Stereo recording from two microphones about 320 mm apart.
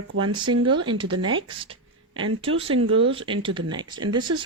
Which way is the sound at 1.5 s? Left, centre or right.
Centre.